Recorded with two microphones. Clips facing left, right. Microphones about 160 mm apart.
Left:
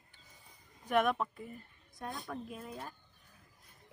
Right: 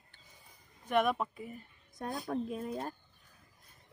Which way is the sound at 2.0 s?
40° right (ahead or behind).